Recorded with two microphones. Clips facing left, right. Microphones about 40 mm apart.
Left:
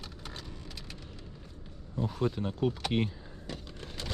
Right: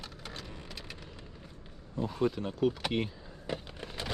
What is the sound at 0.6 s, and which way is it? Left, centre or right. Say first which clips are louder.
Vehicle: right 1 dB; centre.